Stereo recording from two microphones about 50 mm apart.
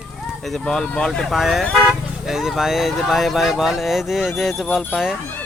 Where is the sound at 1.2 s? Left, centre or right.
Centre.